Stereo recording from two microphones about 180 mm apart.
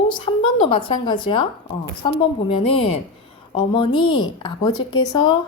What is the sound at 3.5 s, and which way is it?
Speech, 25° left (ahead or behind).